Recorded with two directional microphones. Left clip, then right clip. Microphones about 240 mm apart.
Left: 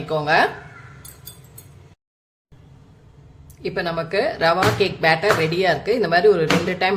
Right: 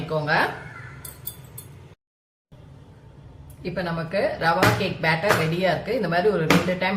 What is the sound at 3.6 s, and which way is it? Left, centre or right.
Speech, left.